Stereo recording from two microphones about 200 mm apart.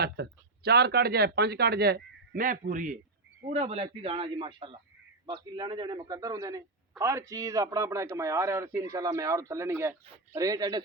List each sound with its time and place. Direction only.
0.0 s a man's voice: 55° right (ahead or behind); by 10.8 s 20° right (ahead or behind)